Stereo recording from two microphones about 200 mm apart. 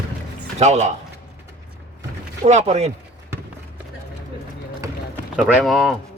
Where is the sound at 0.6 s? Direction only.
35° right (ahead or behind).